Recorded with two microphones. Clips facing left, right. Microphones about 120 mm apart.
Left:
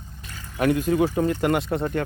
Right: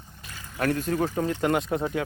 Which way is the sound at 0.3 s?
Centre (ahead or behind).